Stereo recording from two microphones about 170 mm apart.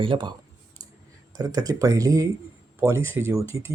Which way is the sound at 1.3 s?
20° right (ahead or behind).